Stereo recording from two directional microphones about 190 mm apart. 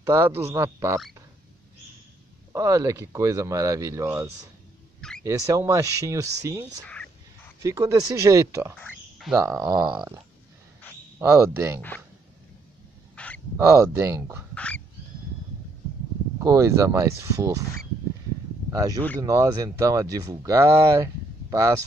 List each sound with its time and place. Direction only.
0.0 s speech: 15° right (ahead or behind)
2.5 s speech: 15° right (ahead or behind)
6.9 s a sound: 5° left (ahead or behind)
7.6 s speech: 20° right (ahead or behind)
9.2 s speech: centre (ahead or behind)
9.6 s speech: 10° right (ahead or behind)
13.1 s a sound: 5° left (ahead or behind)
13.9 s speech: 15° right (ahead or behind)
14.5 s duck: 5° left (ahead or behind)
16.3 s speech: 15° right (ahead or behind)
18.7 s speech: 20° right (ahead or behind)